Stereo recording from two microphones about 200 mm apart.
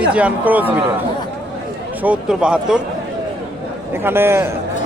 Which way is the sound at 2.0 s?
5° right (ahead or behind).